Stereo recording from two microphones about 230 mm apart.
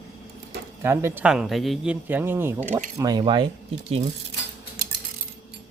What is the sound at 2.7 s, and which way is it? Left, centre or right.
Speech, right.